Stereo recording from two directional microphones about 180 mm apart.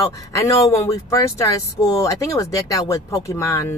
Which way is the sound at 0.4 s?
15° left (ahead or behind).